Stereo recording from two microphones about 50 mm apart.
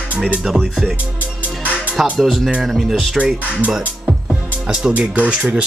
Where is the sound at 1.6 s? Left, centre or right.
Right.